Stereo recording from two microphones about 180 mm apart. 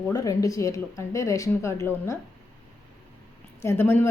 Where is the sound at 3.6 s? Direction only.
15° left (ahead or behind).